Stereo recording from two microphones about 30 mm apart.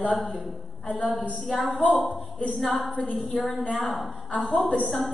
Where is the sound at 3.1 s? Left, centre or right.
Centre.